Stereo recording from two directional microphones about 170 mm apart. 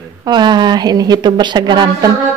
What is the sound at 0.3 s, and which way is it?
A woman's voice, 25° right (ahead or behind).